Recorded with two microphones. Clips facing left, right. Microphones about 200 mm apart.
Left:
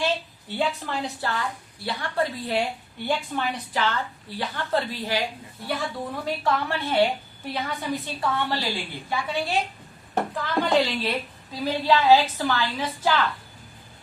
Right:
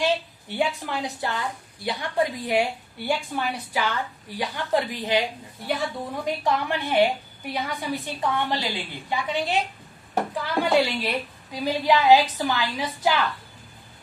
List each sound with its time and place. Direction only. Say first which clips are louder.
0.0 s a woman's voice: right 2 dB; 15° right (ahead or behind)
6.2 s a woman's voice: right 1 dB; 15° right (ahead or behind)